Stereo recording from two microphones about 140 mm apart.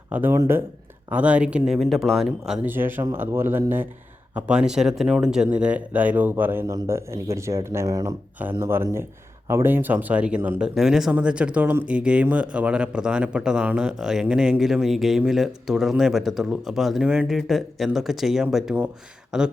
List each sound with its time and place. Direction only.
0.1 s speech: 15° right (ahead or behind)
2.5 s speech: 15° right (ahead or behind)